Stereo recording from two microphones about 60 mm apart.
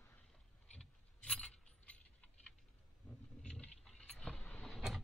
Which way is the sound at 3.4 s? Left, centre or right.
Centre.